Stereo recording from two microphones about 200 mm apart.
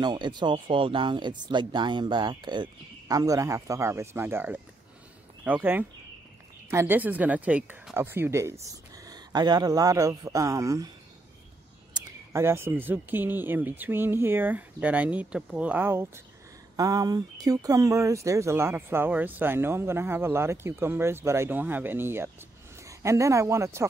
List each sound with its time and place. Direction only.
0.0 s speech: 20° right (ahead or behind)
11.9 s speech: 15° right (ahead or behind)